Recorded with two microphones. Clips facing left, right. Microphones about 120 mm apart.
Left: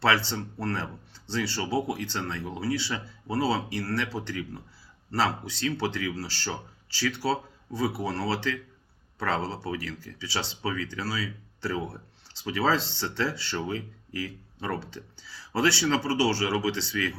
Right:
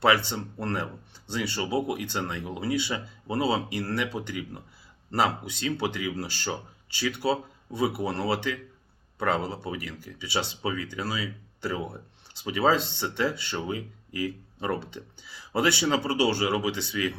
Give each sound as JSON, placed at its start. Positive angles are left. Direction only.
{"t": 0.0, "sound": "speech", "side_deg": -15}